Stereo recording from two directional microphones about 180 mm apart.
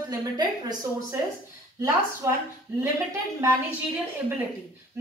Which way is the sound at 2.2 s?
15° right (ahead or behind).